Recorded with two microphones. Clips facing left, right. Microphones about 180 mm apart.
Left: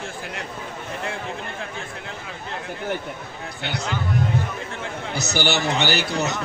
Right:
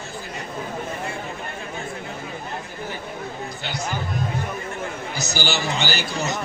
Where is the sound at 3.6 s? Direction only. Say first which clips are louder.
Left 3 dB; 65° left (ahead or behind).